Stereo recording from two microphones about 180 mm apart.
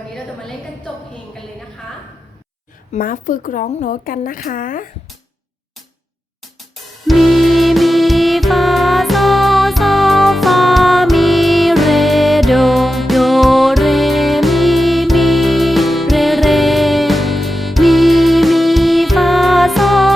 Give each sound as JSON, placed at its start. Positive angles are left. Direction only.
{"t": 2.9, "sound": "speech", "side_deg": 50}
{"t": 7.1, "sound": "music", "side_deg": 0}